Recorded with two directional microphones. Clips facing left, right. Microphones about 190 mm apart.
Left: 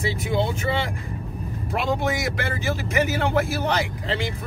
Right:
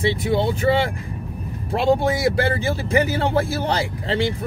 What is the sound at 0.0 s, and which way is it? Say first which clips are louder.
Speech: right 4 dB; 35° right (ahead or behind).